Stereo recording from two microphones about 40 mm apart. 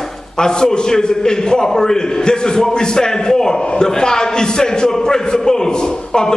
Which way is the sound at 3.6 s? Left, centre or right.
Left.